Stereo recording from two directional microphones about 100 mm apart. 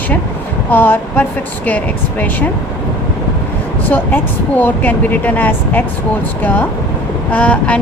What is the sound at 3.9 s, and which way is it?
Speech, 15° left (ahead or behind).